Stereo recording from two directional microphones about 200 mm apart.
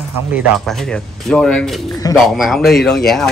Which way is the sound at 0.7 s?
5° left (ahead or behind).